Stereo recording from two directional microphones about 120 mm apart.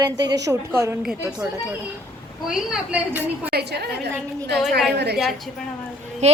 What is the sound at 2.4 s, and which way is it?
Speech, 5° right (ahead or behind).